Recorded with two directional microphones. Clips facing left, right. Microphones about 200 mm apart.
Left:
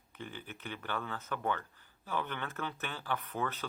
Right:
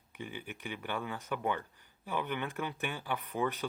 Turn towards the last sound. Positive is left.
turn(degrees=-15)  # may be behind; listen again after turning